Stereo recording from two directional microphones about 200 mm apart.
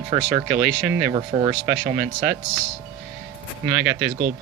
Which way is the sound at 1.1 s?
25° right (ahead or behind).